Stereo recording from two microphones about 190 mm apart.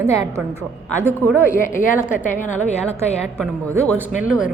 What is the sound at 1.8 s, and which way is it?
A woman's voice, 45° left (ahead or behind).